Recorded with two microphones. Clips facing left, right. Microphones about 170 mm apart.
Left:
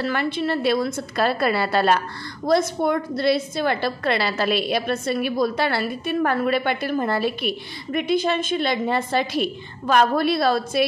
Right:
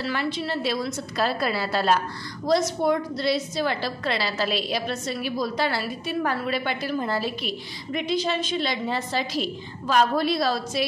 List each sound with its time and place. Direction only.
0.0 s a woman's voice: 55° left (ahead or behind)